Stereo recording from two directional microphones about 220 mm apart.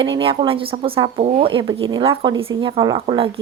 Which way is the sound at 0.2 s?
25° right (ahead or behind).